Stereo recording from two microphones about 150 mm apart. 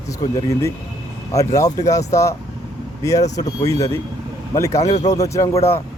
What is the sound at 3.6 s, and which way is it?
Speech, 20° left (ahead or behind).